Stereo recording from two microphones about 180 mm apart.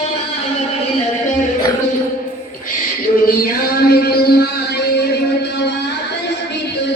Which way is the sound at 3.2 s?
55° left (ahead or behind).